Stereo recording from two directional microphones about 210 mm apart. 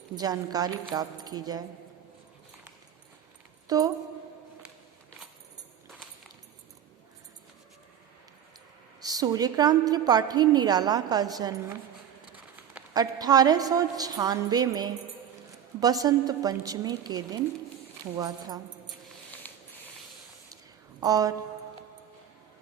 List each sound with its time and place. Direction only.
0.2 s a woman's voice: 20° right (ahead or behind)
3.7 s a woman's voice: 15° right (ahead or behind)
9.0 s a woman's voice: 15° right (ahead or behind)
12.9 s a woman's voice: 20° right (ahead or behind)
19.4 s a sound: 5° left (ahead or behind)
21.0 s a woman's voice: 15° right (ahead or behind)